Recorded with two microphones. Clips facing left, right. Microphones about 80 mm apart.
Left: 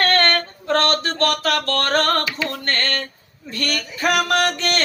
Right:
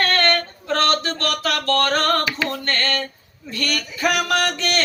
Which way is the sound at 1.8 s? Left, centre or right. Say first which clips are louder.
Even; left.